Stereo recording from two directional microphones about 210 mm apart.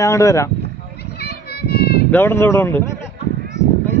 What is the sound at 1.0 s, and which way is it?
Children playing, 50° left (ahead or behind).